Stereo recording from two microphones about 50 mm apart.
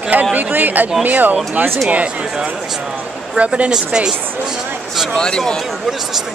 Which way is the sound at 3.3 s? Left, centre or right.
Right.